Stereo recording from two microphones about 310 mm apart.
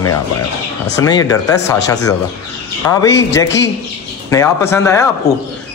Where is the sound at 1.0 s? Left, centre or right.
Centre.